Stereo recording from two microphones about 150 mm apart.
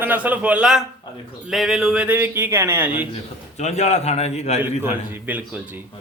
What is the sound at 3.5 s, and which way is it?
A man's voice, 50° left (ahead or behind).